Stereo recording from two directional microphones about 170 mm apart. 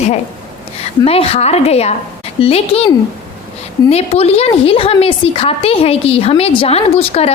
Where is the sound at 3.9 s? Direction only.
35° left (ahead or behind).